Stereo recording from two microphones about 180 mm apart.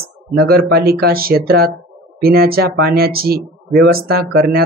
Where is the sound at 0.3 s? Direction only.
75° right (ahead or behind).